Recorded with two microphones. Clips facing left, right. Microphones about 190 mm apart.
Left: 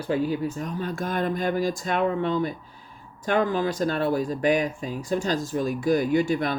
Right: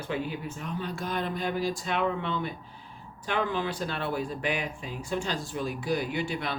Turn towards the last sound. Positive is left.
turn(degrees=45)  # may be behind; listen again after turning